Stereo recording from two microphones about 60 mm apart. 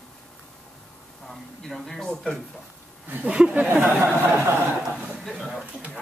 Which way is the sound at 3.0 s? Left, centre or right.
Right.